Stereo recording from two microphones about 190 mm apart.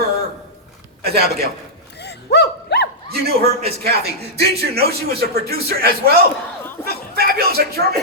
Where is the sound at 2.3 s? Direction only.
60° left (ahead or behind).